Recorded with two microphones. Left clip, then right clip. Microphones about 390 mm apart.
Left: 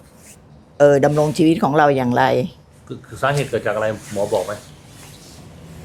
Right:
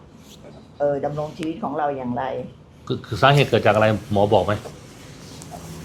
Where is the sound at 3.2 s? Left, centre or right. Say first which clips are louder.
Right 3 dB; right.